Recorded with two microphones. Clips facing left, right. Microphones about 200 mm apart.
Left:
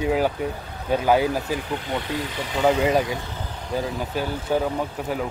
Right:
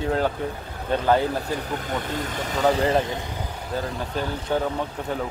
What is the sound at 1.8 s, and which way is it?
Speech, 45° right (ahead or behind).